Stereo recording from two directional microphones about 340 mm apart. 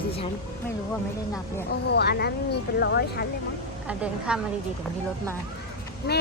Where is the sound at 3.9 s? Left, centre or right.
Centre.